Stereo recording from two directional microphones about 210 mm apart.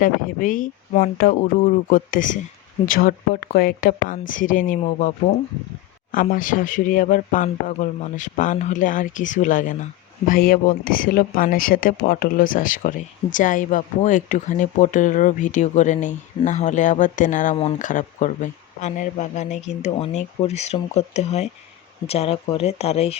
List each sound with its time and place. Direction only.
0.0 s speech: 40° left (ahead or behind)